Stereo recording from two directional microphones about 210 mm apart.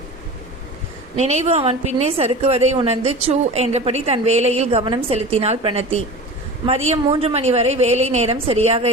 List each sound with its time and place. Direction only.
1.1 s a woman's voice: 30° right (ahead or behind)